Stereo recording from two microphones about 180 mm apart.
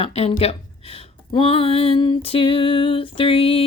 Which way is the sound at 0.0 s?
35° left (ahead or behind).